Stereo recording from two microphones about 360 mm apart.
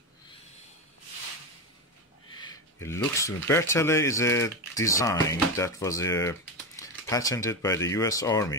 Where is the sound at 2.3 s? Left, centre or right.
Centre.